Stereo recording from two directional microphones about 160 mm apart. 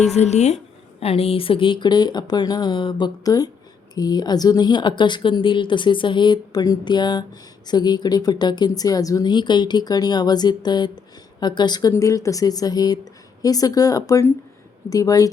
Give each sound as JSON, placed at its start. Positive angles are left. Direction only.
{"t": 0.2, "sound": "speech", "side_deg": 45}